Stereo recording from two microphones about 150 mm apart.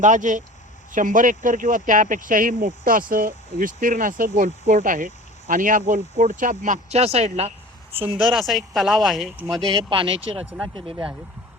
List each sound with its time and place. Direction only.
0.0 s speech: 55° right (ahead or behind)
8.0 s speech: 5° right (ahead or behind)
9.6 s speech: 35° right (ahead or behind)